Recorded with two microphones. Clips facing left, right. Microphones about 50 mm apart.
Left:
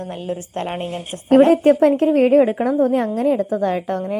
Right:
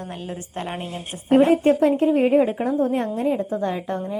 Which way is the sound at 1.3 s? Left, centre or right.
Left.